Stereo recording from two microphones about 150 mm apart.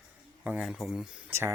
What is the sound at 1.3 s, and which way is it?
Speech, 15° right (ahead or behind).